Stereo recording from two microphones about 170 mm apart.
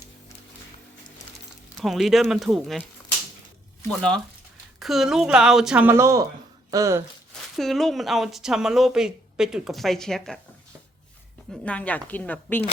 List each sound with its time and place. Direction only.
1.8 s speech: centre (ahead or behind)
3.8 s speech: 5° left (ahead or behind); by 7.0 s 20° right (ahead or behind)
7.5 s speech: centre (ahead or behind)
11.6 s a woman's voice: 5° left (ahead or behind)